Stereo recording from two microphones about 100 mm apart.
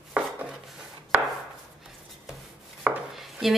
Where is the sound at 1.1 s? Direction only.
20° right (ahead or behind).